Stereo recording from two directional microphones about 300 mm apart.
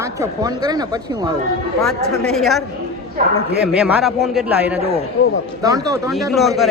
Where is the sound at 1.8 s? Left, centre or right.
Centre.